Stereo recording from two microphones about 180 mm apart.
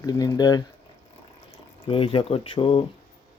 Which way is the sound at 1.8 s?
30° left (ahead or behind).